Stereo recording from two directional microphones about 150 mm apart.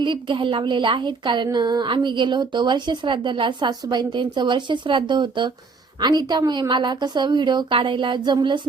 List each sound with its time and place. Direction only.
0.0 s a woman's voice: 35° right (ahead or behind)